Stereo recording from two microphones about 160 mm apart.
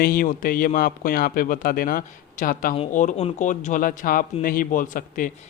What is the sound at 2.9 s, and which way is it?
Speech, 50° left (ahead or behind).